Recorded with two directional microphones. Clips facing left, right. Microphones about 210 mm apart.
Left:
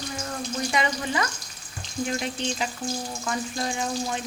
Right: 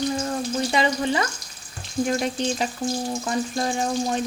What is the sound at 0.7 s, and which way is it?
Speech, 30° right (ahead or behind).